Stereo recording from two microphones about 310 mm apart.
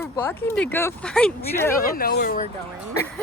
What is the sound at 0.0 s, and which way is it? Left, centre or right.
Speech, centre.